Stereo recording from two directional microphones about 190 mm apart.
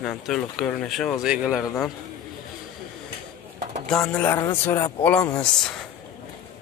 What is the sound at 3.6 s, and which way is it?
Bird, 35° right (ahead or behind).